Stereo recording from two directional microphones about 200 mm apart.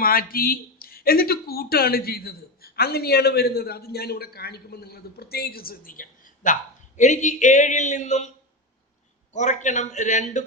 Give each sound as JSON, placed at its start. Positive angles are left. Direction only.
{"t": 0.0, "sound": "speech", "side_deg": 50}
{"t": 9.3, "sound": "a man's voice", "side_deg": 35}